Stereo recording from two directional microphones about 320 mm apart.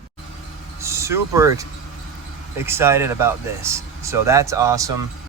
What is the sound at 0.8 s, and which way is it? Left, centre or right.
Speech, centre.